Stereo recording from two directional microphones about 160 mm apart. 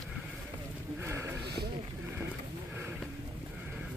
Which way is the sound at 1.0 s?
15° right (ahead or behind).